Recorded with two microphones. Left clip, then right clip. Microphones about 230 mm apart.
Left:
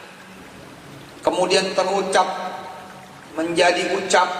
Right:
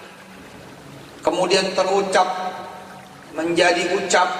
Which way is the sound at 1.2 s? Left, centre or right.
Left.